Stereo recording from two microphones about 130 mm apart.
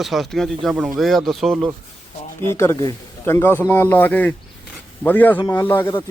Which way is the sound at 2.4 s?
20° left (ahead or behind).